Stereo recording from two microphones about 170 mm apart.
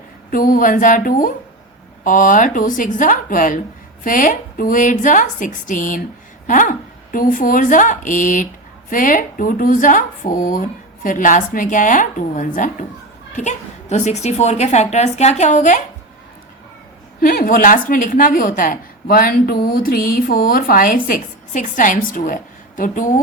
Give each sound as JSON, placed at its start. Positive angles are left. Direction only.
{"t": 0.3, "sound": "a woman's voice", "side_deg": 55}
{"t": 17.2, "sound": "a woman's voice", "side_deg": 55}